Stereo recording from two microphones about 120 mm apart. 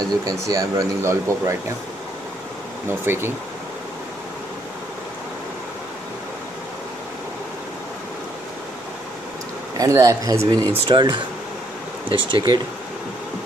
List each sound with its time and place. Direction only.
0.0 s speech: 30° right (ahead or behind)
2.9 s speech: 20° right (ahead or behind)
9.8 s speech: 30° right (ahead or behind)
10.7 s speech: 40° right (ahead or behind)